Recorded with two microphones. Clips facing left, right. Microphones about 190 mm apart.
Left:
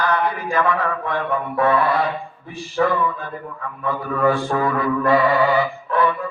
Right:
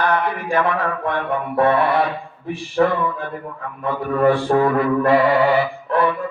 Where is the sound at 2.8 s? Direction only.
45° right (ahead or behind).